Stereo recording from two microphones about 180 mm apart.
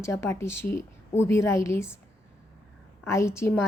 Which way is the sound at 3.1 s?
15° left (ahead or behind).